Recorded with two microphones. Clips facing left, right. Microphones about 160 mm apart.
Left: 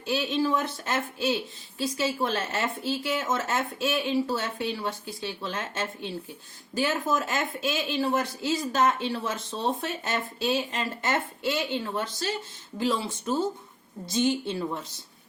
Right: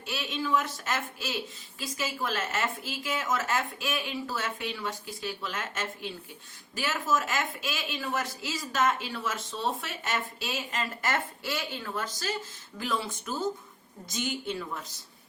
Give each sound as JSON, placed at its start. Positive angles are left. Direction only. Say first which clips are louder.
{"t": 0.1, "sound": "speech", "louder": "left 4 dB", "side_deg": 35}
{"t": 7.2, "sound": "speech", "louder": "left 3 dB", "side_deg": 35}